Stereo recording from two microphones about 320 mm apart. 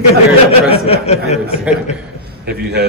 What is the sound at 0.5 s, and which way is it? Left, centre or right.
Speech, centre.